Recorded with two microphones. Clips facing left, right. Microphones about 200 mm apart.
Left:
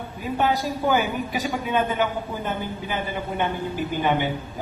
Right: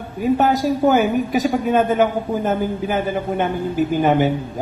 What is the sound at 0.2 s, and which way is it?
A woman's voice, 45° right (ahead or behind).